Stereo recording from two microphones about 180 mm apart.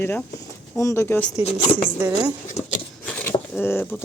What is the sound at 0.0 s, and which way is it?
Speech, 15° left (ahead or behind).